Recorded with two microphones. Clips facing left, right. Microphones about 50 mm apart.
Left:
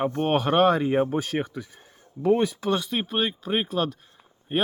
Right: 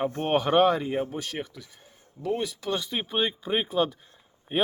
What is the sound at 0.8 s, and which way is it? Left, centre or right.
Speech, left.